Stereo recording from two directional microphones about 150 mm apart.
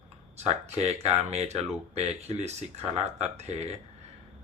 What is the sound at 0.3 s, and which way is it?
Speech, 45° right (ahead or behind).